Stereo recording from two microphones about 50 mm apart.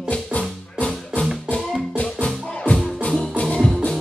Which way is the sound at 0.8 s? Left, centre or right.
Left.